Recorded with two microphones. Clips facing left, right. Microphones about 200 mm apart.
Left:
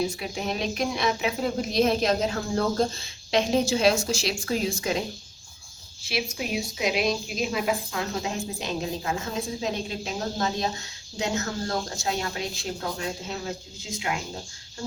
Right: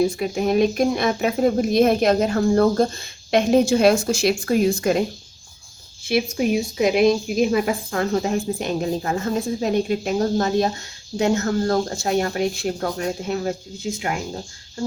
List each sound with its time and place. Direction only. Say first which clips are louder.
0.0 s a woman's voice: right 8 dB; 50° right (ahead or behind)
6.1 s a woman's voice: right 10 dB; 50° right (ahead or behind)